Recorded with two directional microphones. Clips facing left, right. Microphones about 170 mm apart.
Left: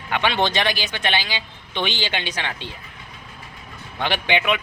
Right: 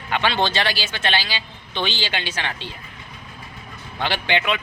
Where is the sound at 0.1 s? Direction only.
15° left (ahead or behind).